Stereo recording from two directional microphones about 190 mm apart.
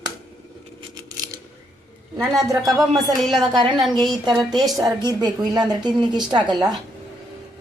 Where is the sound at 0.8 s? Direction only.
20° right (ahead or behind).